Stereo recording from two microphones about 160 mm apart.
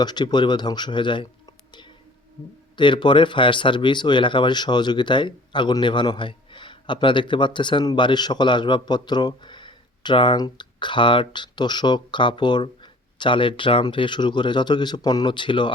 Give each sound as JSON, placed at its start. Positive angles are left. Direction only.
{"t": 0.0, "sound": "speech", "side_deg": 25}
{"t": 2.7, "sound": "speech", "side_deg": 30}